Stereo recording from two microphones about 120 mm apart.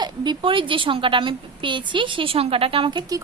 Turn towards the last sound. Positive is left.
turn(degrees=-40)  # may be behind; listen again after turning